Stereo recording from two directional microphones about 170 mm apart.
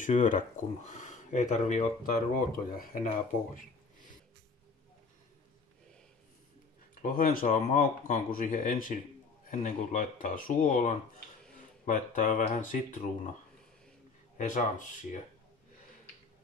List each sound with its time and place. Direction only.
0.0 s speech: 50° left (ahead or behind)
7.0 s speech: 50° left (ahead or behind)
14.4 s speech: 50° left (ahead or behind)